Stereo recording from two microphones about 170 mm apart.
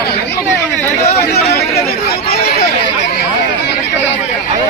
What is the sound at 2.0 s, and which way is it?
Chatter, 65° left (ahead or behind).